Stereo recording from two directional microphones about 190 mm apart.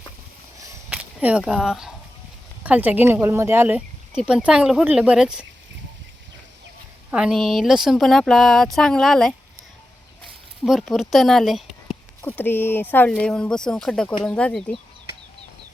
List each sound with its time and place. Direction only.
0.6 s a sound: 10° right (ahead or behind)
2.6 s speech: 10° right (ahead or behind)
7.1 s speech: 5° right (ahead or behind)
10.6 s speech: centre (ahead or behind)